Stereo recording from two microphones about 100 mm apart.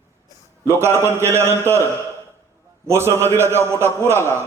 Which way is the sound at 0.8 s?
25° right (ahead or behind).